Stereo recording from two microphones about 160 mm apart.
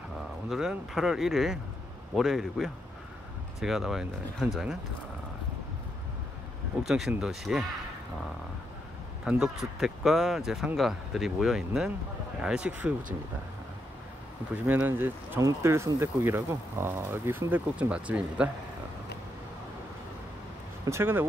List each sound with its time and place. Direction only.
0.5 s speech: 5° right (ahead or behind)
6.8 s speech: centre (ahead or behind)
9.2 s speech: 5° right (ahead or behind)
14.7 s speech: 10° right (ahead or behind)
20.8 s speech: 15° right (ahead or behind)